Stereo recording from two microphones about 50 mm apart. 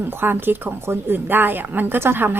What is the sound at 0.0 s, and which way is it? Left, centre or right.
A woman's voice, right.